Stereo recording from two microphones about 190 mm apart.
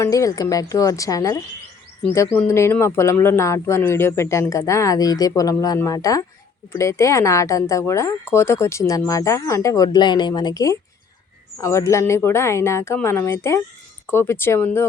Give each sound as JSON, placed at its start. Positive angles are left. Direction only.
{"t": 0.0, "sound": "speech", "side_deg": 15}